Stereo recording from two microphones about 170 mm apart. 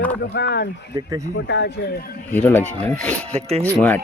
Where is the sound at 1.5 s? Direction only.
90° left.